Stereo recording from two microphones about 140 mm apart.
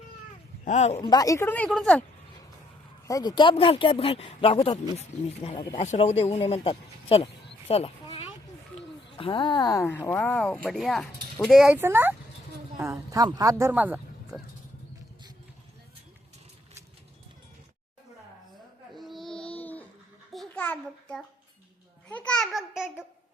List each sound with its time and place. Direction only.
0.6 s speech: 55° left (ahead or behind)
1.0 s speech: 25° left (ahead or behind); by 2.0 s 10° left (ahead or behind)
3.1 s speech: 30° left (ahead or behind); by 7.8 s 45° left (ahead or behind)
9.1 s speech: 40° left (ahead or behind)
9.8 s speech: 15° left (ahead or behind); by 11.8 s 5° right (ahead or behind)
11.8 s speech: 15° right (ahead or behind)
18.9 s a sound: centre (ahead or behind)
22.1 s babbling: 10° left (ahead or behind)